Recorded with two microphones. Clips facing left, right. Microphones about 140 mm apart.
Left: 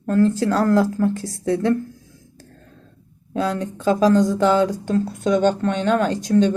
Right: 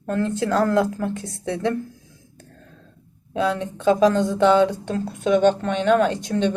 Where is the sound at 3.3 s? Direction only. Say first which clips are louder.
Even; 20° right (ahead or behind).